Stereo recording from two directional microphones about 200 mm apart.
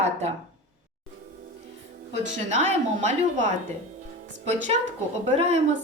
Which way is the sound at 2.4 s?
35° right (ahead or behind).